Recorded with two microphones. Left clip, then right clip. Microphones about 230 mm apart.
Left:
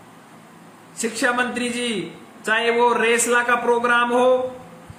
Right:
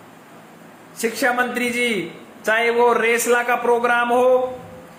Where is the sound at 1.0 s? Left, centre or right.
Centre.